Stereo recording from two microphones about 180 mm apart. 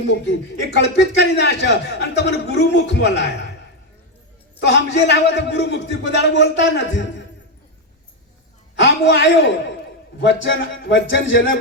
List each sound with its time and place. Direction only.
0.8 s a man's voice: 70° left (ahead or behind)
4.6 s a man's voice: 70° left (ahead or behind)
8.7 s a man's voice: 75° left (ahead or behind)